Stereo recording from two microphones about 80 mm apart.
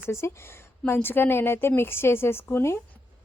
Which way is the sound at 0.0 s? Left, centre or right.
Left.